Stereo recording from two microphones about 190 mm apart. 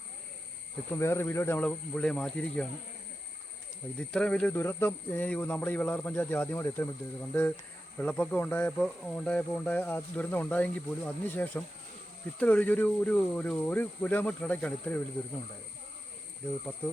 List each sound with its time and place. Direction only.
0.9 s speech: 15° left (ahead or behind)
3.9 s speech: 5° left (ahead or behind)